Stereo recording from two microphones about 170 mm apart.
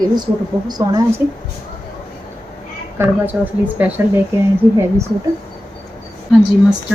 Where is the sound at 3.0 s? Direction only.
15° right (ahead or behind).